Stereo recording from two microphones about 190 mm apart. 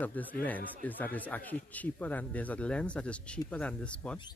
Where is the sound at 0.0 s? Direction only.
10° left (ahead or behind).